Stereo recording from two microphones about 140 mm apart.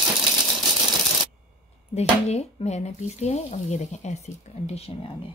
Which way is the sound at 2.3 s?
50° left (ahead or behind).